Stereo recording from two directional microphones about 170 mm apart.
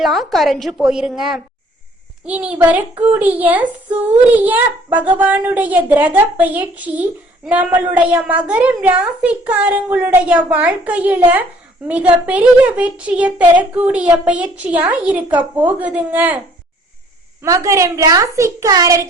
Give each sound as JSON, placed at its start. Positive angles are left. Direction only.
{"t": 0.0, "sound": "a woman's voice", "side_deg": 0}
{"t": 17.4, "sound": "a woman's voice", "side_deg": -20}